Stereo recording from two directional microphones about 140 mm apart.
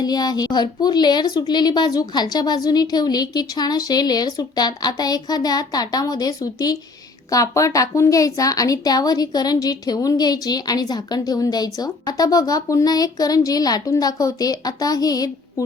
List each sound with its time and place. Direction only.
0.0 s speech: 30° left (ahead or behind)